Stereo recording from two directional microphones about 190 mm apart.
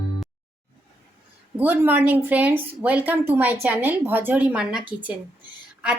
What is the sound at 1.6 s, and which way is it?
Speech, 10° right (ahead or behind).